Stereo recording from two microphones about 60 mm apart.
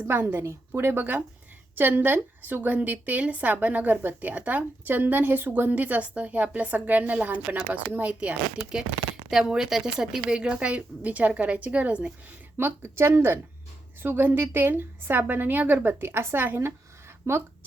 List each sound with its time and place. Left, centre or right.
0.0 s a woman's voice: right
9.3 s a woman's voice: centre
12.5 s a woman's voice: right
17.2 s speech: right